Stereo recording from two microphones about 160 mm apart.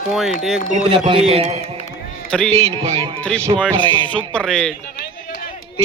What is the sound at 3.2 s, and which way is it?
A man's voice, 10° left (ahead or behind).